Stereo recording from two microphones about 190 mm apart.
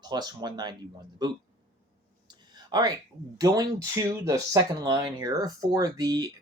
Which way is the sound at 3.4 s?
20° right (ahead or behind).